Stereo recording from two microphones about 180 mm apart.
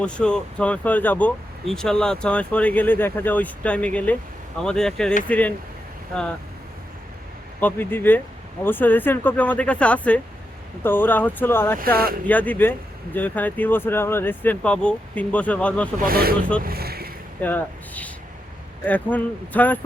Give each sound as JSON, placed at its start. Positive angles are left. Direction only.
{"t": 0.0, "sound": "speech", "side_deg": 5}
{"t": 7.6, "sound": "speech", "side_deg": 10}
{"t": 16.0, "sound": "speech", "side_deg": -55}
{"t": 16.6, "sound": "boat", "side_deg": -60}
{"t": 17.4, "sound": "speech", "side_deg": 10}